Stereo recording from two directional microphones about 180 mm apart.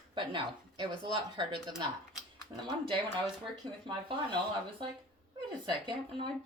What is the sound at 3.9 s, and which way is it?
Speech, 25° right (ahead or behind).